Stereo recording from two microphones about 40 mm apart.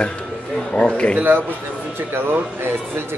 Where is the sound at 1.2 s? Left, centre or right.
Right.